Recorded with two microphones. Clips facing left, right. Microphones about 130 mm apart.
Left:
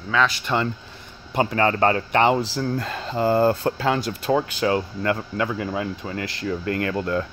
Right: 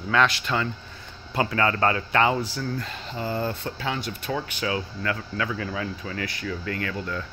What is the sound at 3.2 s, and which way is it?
Speech, 60° left (ahead or behind).